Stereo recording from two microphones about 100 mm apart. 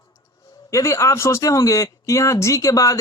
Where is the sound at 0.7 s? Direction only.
30° left (ahead or behind).